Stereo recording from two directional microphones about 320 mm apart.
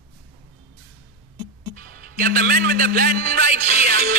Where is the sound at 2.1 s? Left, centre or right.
Right.